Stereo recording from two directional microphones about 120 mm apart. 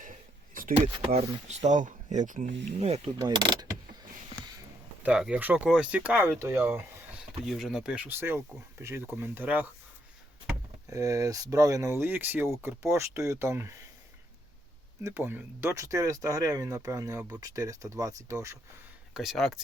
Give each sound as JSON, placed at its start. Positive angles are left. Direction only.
{"t": 1.5, "sound": "speech", "side_deg": -80}
{"t": 3.2, "sound": "speech", "side_deg": -35}
{"t": 5.0, "sound": "speech", "side_deg": -10}
{"t": 7.4, "sound": "speech", "side_deg": -5}
{"t": 10.8, "sound": "speech", "side_deg": -30}
{"t": 15.0, "sound": "speech", "side_deg": -20}
{"t": 19.1, "sound": "speech", "side_deg": 0}